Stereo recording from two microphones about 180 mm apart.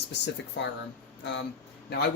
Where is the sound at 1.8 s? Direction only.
65° left (ahead or behind).